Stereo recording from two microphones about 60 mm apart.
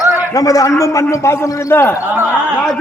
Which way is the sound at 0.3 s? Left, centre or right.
Left.